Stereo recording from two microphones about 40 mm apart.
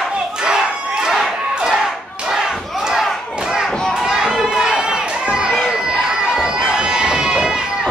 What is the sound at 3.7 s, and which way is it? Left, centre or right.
Children playing, centre.